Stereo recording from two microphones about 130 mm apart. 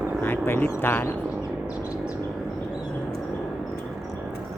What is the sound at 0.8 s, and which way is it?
Speech, 15° left (ahead or behind).